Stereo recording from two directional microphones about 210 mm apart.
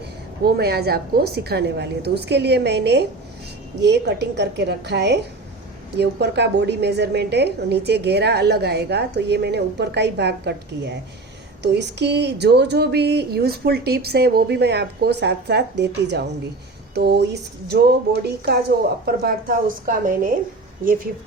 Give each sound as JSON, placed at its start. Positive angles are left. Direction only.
{"t": 0.4, "sound": "a woman's voice", "side_deg": -50}